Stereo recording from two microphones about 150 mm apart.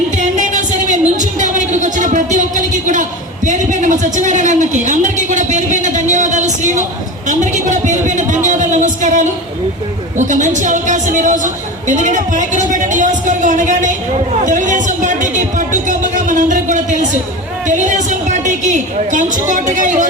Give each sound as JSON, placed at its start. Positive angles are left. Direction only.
{"t": 0.2, "sound": "a woman's voice", "side_deg": -55}